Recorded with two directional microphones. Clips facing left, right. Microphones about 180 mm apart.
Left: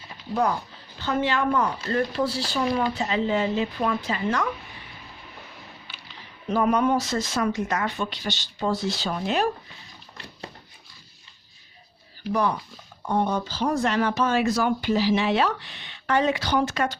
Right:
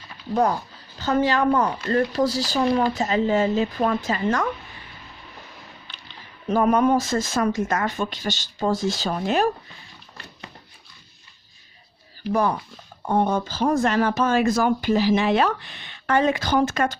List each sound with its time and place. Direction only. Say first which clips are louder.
0.9 s speech: right 4 dB; 40° right (ahead or behind)
5.9 s a sound: even; 5° left (ahead or behind)
6.5 s speech: right 3 dB; 45° right (ahead or behind)
12.3 s speech: right 2 dB; 45° right (ahead or behind)